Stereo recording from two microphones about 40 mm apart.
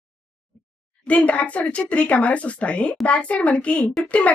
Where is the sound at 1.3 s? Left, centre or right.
Left.